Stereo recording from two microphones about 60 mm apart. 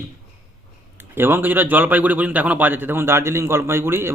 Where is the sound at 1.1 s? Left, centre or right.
Right.